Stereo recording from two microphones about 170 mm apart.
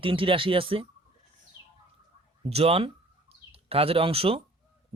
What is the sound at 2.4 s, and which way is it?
Speech, 35° right (ahead or behind).